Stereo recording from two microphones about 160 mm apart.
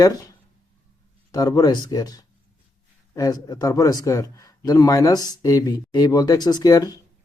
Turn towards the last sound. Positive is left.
turn(degrees=20)  # may be behind; listen again after turning